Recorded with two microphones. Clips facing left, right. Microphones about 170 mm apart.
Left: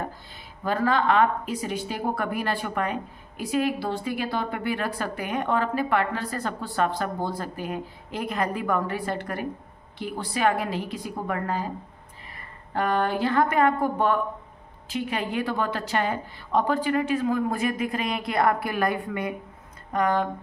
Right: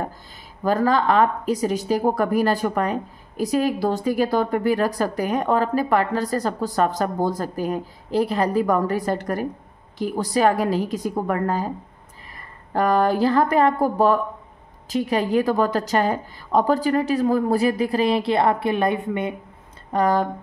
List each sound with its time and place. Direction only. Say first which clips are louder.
0.7 s speech: right 4 dB; 40° right (ahead or behind)
12.7 s speech: right 6 dB; 40° right (ahead or behind); by 19.3 s 25° right (ahead or behind)
19.9 s speech: right 4 dB; 35° right (ahead or behind)